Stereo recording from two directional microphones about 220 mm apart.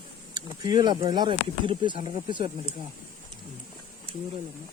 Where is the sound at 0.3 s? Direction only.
20° right (ahead or behind).